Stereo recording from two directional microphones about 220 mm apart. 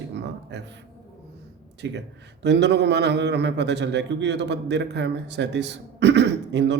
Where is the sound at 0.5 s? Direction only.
50° right (ahead or behind).